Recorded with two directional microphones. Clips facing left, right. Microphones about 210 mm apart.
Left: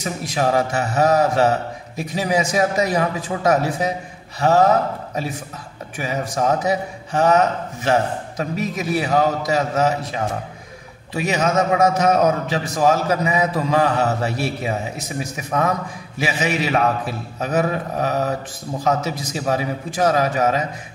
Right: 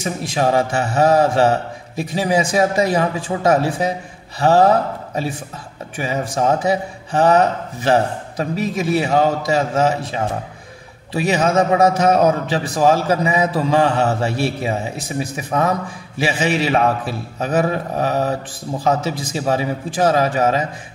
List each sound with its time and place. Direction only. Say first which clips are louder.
0.0 s a man's voice: right 2 dB; 30° right (ahead or behind)
11.1 s a man's voice: right 3 dB; 30° right (ahead or behind)